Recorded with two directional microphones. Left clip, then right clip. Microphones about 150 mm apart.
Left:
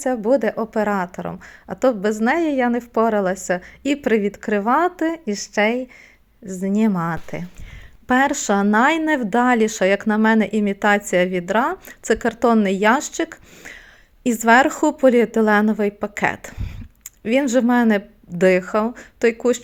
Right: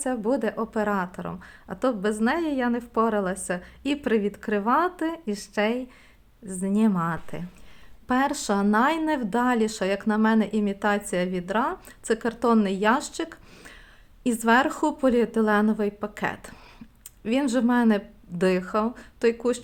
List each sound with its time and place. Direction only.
0.0 s a woman's voice: 25° left (ahead or behind)